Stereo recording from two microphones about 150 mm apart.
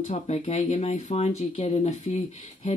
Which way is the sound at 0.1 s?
50° left (ahead or behind).